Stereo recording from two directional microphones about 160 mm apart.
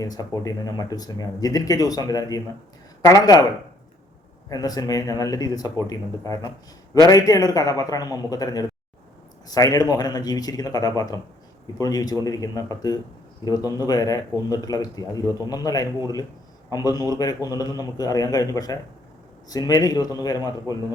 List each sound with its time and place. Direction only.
0.0 s speech: 25° left (ahead or behind)
4.4 s speech: 25° left (ahead or behind)